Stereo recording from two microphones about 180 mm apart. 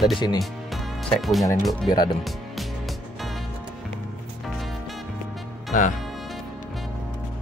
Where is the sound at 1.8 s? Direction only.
25° left (ahead or behind).